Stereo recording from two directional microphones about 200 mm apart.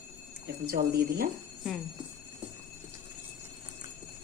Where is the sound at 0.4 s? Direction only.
50° right (ahead or behind).